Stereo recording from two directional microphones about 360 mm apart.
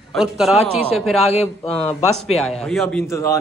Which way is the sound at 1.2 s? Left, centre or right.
Centre.